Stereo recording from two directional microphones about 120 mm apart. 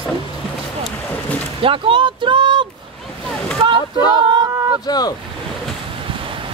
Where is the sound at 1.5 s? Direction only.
50° right (ahead or behind).